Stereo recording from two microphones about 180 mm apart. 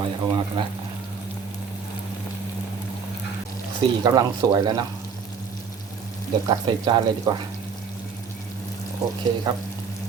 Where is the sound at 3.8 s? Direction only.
20° right (ahead or behind).